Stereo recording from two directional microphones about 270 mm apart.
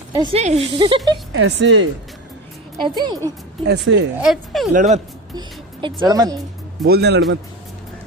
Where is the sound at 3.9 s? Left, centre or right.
Right.